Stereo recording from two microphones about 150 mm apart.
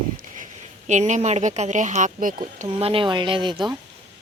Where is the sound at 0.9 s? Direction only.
50° right (ahead or behind).